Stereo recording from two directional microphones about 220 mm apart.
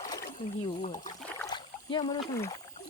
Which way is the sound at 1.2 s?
10° left (ahead or behind).